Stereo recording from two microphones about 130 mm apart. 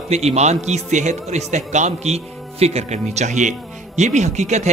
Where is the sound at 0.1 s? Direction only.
55° right (ahead or behind).